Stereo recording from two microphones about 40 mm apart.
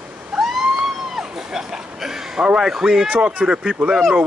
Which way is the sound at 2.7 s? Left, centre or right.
Centre.